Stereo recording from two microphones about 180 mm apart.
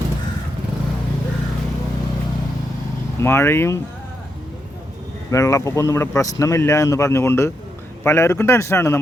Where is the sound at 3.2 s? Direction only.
15° left (ahead or behind).